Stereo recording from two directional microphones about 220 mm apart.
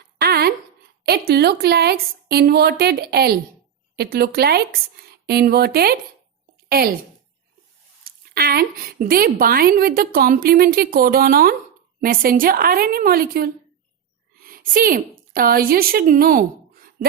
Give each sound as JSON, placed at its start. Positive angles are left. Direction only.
{"t": 0.2, "sound": "a sound", "side_deg": -45}
{"t": 1.0, "sound": "a woman's voice", "side_deg": -45}
{"t": 8.0, "sound": "a woman's voice", "side_deg": -45}